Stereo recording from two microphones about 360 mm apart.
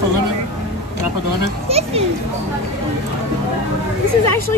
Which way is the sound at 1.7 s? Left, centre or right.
Centre.